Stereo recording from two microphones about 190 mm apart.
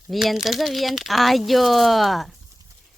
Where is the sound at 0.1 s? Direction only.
Centre (ahead or behind).